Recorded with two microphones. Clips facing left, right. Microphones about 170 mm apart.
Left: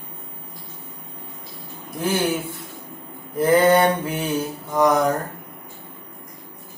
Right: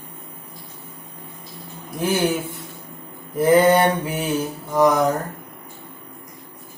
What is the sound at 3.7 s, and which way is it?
Mantra, centre (ahead or behind).